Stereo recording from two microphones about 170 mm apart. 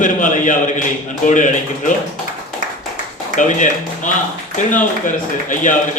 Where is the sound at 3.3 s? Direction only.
50° left (ahead or behind).